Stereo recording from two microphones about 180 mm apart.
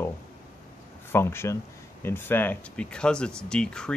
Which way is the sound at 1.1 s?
15° left (ahead or behind).